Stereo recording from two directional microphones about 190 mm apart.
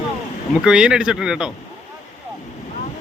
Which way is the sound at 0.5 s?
5° right (ahead or behind).